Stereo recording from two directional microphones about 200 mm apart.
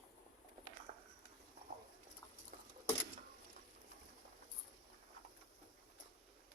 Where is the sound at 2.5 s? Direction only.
40° right (ahead or behind).